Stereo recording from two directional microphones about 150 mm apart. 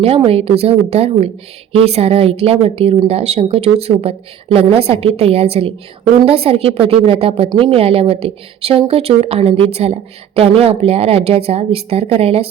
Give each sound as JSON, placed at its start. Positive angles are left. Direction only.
{"t": 0.0, "sound": "a woman's voice", "side_deg": -40}